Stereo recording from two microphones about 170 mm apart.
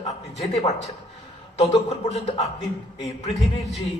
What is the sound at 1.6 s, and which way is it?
Speech, 40° left (ahead or behind).